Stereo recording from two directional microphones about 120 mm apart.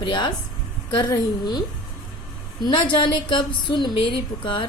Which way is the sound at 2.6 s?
40° left (ahead or behind).